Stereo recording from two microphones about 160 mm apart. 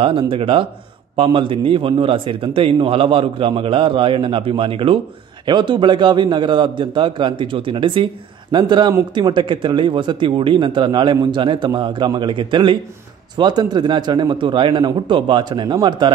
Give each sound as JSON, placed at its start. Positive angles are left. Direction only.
{"t": 0.0, "sound": "a man's voice", "side_deg": -35}